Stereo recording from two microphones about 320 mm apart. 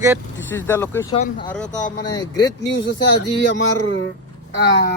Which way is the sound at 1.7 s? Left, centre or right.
Left.